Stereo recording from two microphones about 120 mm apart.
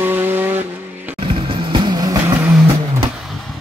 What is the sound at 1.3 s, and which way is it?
Vehicle, 45° right (ahead or behind).